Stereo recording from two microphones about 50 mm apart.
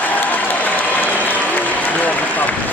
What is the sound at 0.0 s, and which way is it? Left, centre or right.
Applause, left.